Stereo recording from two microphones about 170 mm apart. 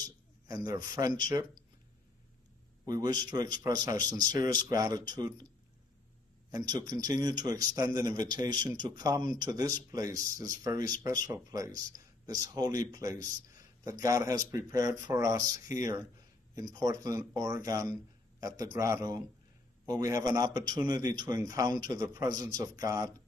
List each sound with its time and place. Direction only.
0.5 s a man's voice: 25° right (ahead or behind)
2.8 s a man's voice: 25° right (ahead or behind)
6.5 s a man's voice: 25° right (ahead or behind)